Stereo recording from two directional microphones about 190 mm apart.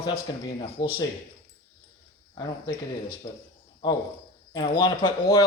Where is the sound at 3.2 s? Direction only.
25° left (ahead or behind).